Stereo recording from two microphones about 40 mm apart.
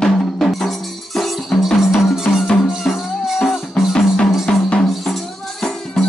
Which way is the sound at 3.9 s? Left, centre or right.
Centre.